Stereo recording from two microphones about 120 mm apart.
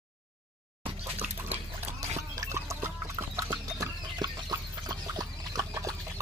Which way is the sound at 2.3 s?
25° right (ahead or behind).